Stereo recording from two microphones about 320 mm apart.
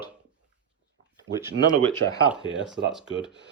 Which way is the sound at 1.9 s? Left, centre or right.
Centre.